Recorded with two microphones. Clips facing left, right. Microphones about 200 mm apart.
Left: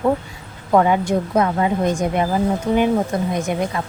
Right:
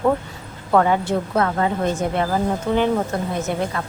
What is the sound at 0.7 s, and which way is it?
Speech, 15° left (ahead or behind).